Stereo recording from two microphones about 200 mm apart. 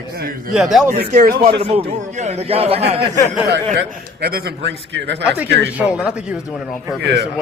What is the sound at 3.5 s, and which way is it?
A man's voice, 55° right (ahead or behind).